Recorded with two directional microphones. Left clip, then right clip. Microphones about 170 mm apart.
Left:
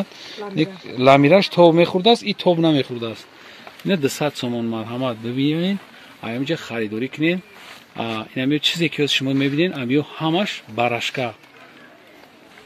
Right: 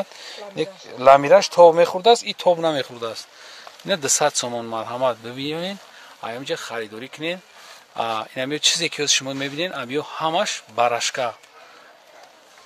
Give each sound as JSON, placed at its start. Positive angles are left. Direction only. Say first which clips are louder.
{"t": 0.6, "sound": "speech", "louder": "left 4 dB", "side_deg": -15}
{"t": 3.8, "sound": "speech", "louder": "right 1 dB", "side_deg": -35}
{"t": 6.5, "sound": "speech", "louder": "left 3 dB", "side_deg": -10}
{"t": 7.9, "sound": "speech", "louder": "right 2 dB", "side_deg": -30}